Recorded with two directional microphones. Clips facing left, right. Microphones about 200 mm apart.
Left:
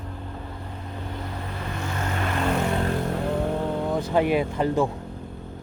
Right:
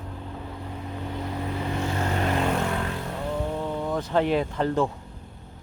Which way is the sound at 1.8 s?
30° right (ahead or behind).